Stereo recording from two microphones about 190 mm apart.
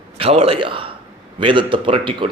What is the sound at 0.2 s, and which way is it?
A man's voice, 30° right (ahead or behind).